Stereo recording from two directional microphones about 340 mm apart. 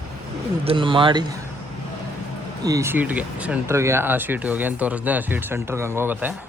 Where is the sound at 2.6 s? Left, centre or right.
Centre.